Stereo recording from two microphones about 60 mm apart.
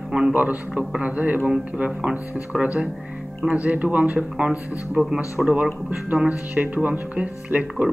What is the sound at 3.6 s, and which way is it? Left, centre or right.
Speech, right.